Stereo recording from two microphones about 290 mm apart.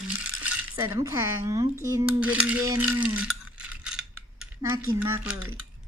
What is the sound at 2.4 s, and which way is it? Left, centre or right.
Mechanisms, centre.